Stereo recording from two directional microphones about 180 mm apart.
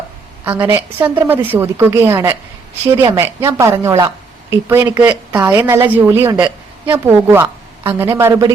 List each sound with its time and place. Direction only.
0.4 s a woman's voice: 10° right (ahead or behind)